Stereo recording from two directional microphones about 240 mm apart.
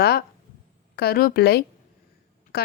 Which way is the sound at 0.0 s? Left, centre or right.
Left.